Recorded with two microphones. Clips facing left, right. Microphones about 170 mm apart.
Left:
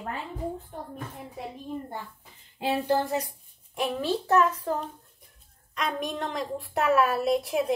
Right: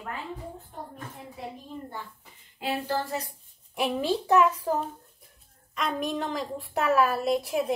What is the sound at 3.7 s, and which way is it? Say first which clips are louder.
A woman's voice: right 1 dB; 10° right (ahead or behind).